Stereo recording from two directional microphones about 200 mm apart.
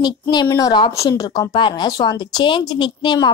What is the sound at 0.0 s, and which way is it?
Speech, 20° left (ahead or behind).